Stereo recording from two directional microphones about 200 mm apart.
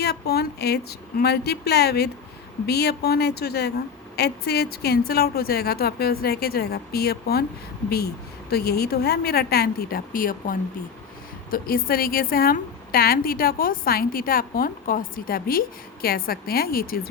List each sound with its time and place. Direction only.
0.0 s a woman's voice: 50° left (ahead or behind)